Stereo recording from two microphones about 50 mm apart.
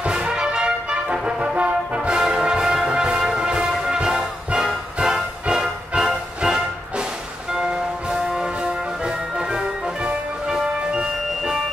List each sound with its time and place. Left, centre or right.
0.0 s brass instrument: centre
5.0 s music: centre
10.5 s music: centre